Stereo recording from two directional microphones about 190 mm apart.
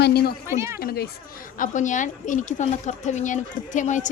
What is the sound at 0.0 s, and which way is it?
Speech, 60° left (ahead or behind).